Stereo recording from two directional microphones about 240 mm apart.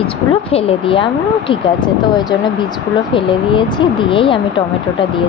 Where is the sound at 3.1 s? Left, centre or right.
Centre.